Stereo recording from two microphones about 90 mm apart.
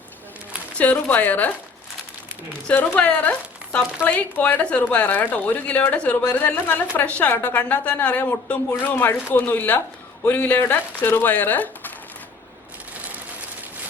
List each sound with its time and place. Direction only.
0.8 s a woman's voice: 20° left (ahead or behind)
2.7 s a woman's voice: 20° left (ahead or behind)